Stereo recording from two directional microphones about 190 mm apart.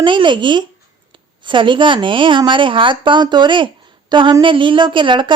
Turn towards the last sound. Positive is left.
turn(degrees=-25)  # may be behind; listen again after turning